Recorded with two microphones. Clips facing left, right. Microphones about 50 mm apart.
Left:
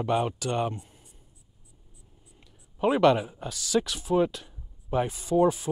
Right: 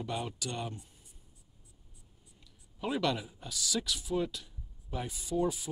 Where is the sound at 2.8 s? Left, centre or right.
Left.